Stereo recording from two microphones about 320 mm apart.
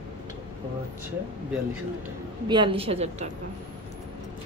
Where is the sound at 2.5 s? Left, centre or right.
Centre.